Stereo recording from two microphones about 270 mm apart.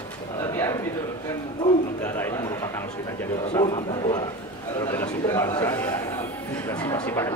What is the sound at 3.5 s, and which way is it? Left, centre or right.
A man's voice, centre.